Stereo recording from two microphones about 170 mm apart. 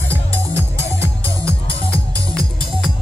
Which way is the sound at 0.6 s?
20° right (ahead or behind).